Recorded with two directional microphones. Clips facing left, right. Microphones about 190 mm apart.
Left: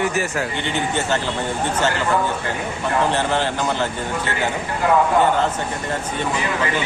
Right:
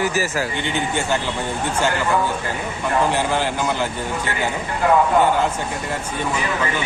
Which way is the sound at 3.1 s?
10° right (ahead or behind).